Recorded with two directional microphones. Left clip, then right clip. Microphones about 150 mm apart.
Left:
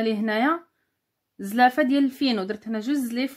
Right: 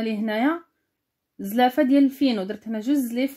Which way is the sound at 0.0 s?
35° right (ahead or behind).